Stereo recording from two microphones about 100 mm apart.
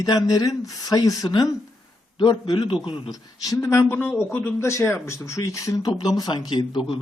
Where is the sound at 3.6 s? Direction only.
25° left (ahead or behind).